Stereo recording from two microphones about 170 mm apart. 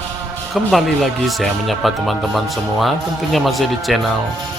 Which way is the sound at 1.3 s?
Centre (ahead or behind).